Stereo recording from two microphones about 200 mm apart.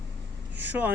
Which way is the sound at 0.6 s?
10° right (ahead or behind).